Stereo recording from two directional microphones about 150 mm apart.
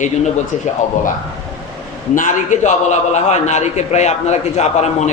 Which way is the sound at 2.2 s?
60° left (ahead or behind).